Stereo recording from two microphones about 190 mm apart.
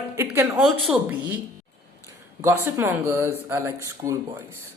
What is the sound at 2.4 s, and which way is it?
Speech, 10° right (ahead or behind).